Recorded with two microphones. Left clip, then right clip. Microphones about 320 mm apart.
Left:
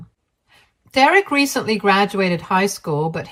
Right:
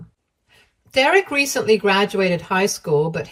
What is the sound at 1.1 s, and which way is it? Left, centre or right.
Speech, centre.